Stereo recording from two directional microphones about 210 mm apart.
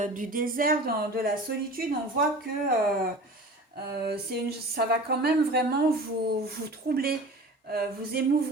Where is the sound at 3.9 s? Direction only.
50° right (ahead or behind).